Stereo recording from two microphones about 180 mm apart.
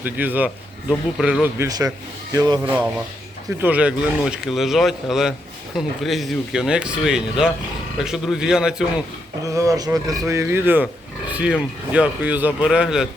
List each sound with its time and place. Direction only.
0.0 s speech: 10° right (ahead or behind)
1.6 s speech: 20° right (ahead or behind)
2.6 s speech: 10° right (ahead or behind)
9.5 s speech: 20° right (ahead or behind)